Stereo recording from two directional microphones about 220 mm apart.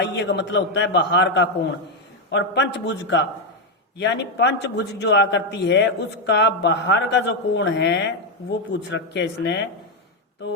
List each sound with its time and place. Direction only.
0.0 s a man's voice: 55° left (ahead or behind)